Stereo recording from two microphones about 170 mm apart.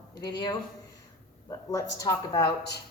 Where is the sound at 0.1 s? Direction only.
25° left (ahead or behind).